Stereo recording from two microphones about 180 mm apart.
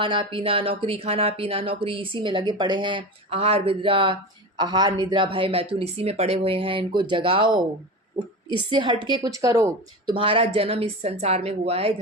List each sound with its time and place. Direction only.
0.0 s speech: 30° right (ahead or behind)
8.7 s speech: 25° right (ahead or behind)
10.2 s a woman's voice: 30° right (ahead or behind)